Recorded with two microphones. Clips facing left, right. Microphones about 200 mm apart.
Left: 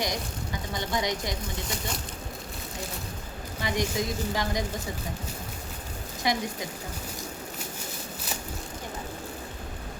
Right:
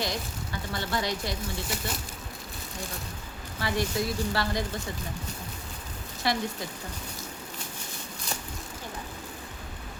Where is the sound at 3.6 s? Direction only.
15° left (ahead or behind).